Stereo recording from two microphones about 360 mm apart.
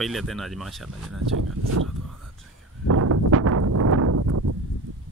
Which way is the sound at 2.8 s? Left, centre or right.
Right.